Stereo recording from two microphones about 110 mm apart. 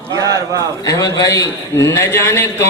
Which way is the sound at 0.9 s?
30° left (ahead or behind).